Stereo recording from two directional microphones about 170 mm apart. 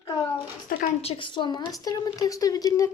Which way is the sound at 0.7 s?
60° left (ahead or behind).